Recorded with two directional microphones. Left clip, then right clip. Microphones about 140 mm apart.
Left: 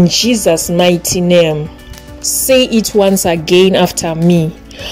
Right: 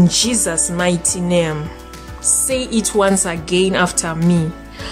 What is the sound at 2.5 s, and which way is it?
A woman's voice, 15° left (ahead or behind).